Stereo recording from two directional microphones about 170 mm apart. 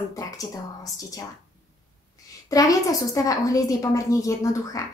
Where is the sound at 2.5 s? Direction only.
20° left (ahead or behind).